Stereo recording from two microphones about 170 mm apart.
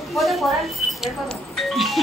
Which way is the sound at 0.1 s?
Centre (ahead or behind).